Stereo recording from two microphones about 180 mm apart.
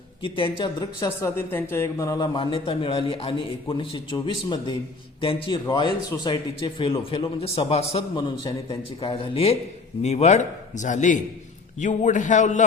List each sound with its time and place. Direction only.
0.2 s a man's voice: 30° left (ahead or behind)
1.4 s a man's voice: 10° left (ahead or behind); by 12.6 s 45° left (ahead or behind)